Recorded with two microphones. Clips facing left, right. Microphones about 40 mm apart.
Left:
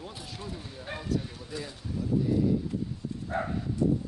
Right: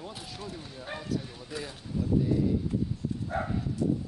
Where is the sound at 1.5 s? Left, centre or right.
Centre.